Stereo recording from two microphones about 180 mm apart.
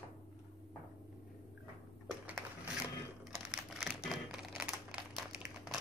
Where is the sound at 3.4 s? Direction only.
5° right (ahead or behind).